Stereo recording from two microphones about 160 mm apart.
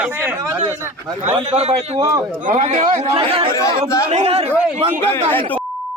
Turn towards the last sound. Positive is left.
turn(degrees=-40)  # may be behind; listen again after turning